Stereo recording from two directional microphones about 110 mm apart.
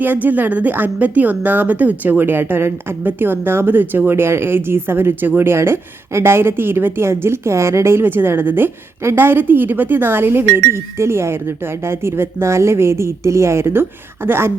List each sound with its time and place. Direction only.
0.0 s speech: 15° right (ahead or behind)